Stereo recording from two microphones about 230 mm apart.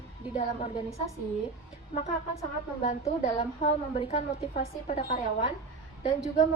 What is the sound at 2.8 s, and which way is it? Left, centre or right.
A woman's voice, left.